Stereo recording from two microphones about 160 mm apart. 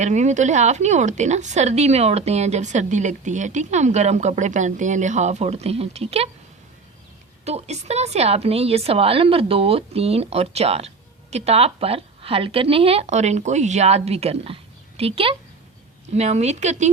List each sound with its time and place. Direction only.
0.0 s a woman's voice: 45° right (ahead or behind)
7.4 s a woman's voice: 45° right (ahead or behind)